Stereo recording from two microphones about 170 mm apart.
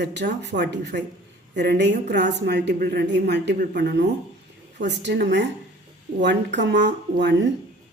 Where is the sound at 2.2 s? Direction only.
70° right (ahead or behind).